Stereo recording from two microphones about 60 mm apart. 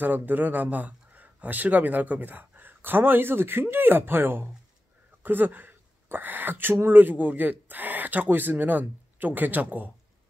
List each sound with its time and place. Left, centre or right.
0.0 s speech: right